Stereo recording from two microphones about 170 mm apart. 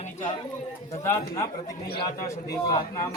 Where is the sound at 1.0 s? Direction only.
15° left (ahead or behind).